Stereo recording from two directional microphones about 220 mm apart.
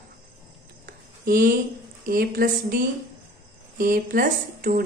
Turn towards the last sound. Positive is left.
turn(degrees=-40)  # may be behind; listen again after turning